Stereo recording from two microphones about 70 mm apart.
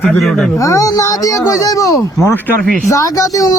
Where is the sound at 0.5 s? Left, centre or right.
Left.